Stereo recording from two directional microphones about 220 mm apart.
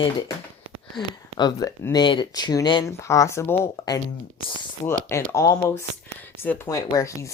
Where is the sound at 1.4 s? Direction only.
15° left (ahead or behind).